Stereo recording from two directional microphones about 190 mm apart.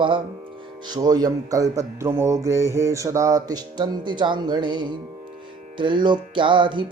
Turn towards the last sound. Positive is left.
turn(degrees=-25)  # may be behind; listen again after turning